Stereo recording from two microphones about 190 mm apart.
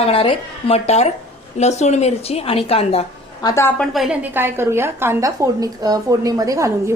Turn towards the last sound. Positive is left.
turn(degrees=-15)  # may be behind; listen again after turning